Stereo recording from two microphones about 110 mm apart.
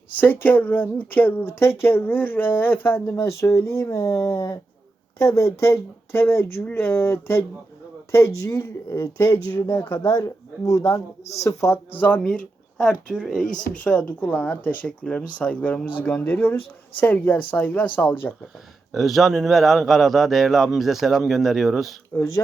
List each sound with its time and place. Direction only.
0.2 s speech: 15° left (ahead or behind)
11.9 s speech: 15° left (ahead or behind)
18.9 s a man's voice: centre (ahead or behind)